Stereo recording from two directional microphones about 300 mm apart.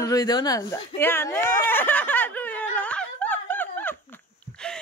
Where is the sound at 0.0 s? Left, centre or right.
Centre.